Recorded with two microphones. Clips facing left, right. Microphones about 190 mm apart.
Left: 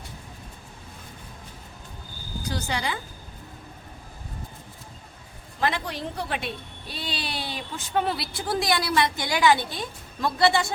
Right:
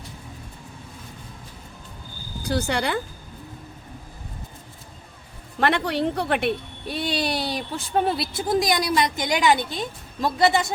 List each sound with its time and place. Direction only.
2.5 s speech: 60° right (ahead or behind)
5.5 s speech: 65° right (ahead or behind); by 10.7 s 20° right (ahead or behind)